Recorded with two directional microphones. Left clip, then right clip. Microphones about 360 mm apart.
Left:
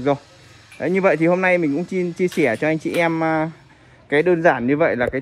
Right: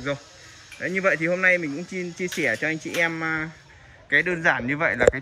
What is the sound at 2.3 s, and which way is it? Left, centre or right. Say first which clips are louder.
Speech: left 4 dB; left.